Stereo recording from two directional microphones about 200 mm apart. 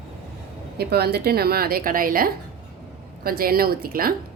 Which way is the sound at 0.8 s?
55° right (ahead or behind).